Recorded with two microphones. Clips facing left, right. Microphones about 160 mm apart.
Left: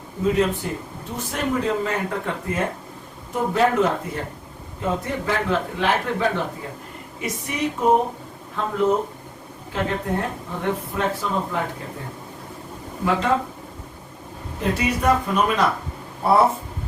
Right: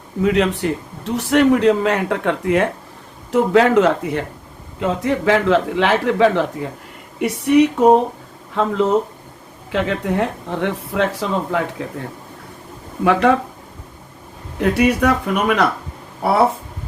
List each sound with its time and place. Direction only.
0.2 s a man's voice: 80° right
7.2 s speech: 70° right (ahead or behind)
8.5 s speech: 90° right
13.1 s speech: 75° right (ahead or behind)
14.6 s speech: 70° right (ahead or behind)